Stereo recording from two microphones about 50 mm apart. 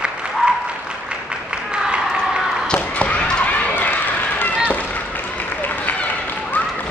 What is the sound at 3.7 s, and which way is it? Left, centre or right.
Run, left.